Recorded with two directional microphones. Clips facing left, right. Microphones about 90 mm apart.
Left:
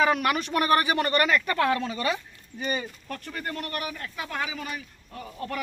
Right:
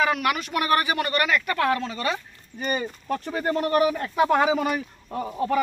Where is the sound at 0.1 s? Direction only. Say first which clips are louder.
Even; 35° left (ahead or behind).